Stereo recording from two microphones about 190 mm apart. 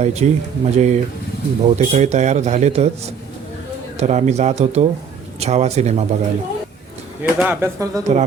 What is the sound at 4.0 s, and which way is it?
A man's voice, 35° right (ahead or behind).